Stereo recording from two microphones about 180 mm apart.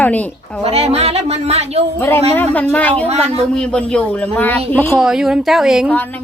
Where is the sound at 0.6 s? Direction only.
35° right (ahead or behind).